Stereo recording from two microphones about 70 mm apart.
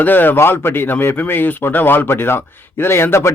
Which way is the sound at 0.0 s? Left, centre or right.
Left.